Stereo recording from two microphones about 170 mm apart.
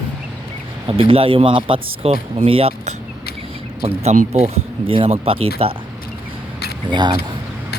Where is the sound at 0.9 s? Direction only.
35° right (ahead or behind).